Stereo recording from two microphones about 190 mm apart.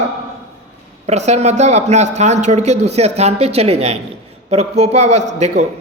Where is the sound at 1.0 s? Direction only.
35° right (ahead or behind).